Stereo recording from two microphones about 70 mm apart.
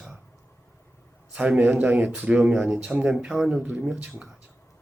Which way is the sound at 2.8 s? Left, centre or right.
Right.